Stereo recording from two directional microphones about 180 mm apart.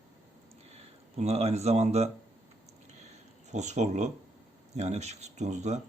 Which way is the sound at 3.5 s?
40° right (ahead or behind).